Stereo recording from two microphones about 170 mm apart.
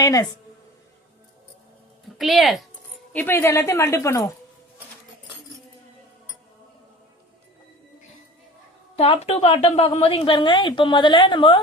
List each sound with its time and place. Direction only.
0.0 s a woman's voice: 20° left (ahead or behind)
2.1 s speech: centre (ahead or behind)
3.1 s speech: 10° left (ahead or behind)
9.0 s a woman's voice: 35° left (ahead or behind)